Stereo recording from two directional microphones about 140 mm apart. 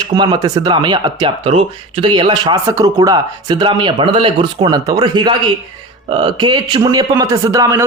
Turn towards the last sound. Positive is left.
turn(degrees=-25)  # may be behind; listen again after turning